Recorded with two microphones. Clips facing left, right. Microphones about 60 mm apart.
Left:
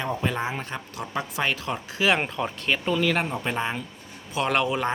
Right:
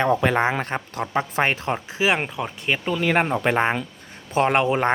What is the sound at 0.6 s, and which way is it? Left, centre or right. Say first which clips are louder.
Speech: right 6 dB; right.